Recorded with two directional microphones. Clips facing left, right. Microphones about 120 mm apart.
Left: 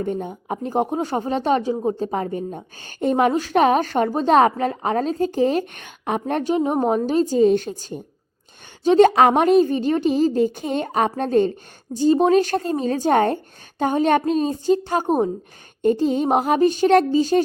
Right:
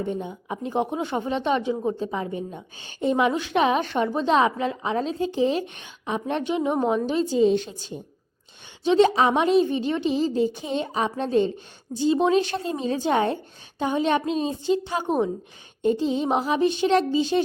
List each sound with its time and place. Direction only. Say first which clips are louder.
0.0 s speech: left 3 dB; 45° left (ahead or behind); by 2.0 s 30° left (ahead or behind)
2.0 s a woman's voice: left 4 dB; 45° left (ahead or behind)